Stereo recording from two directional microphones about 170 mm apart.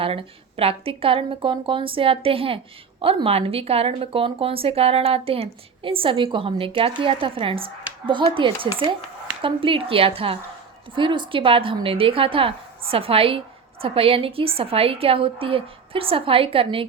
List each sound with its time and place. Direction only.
0.0 s speech: 35° right (ahead or behind)